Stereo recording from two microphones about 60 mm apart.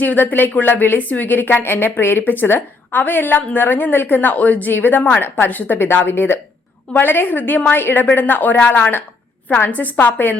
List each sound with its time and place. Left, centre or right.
0.0 s a woman's voice: left